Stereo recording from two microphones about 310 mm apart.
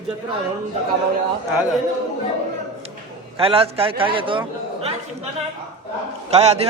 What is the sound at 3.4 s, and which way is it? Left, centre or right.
Speech, centre.